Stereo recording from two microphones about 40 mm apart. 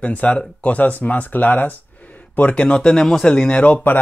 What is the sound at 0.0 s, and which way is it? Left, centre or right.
Speech, left.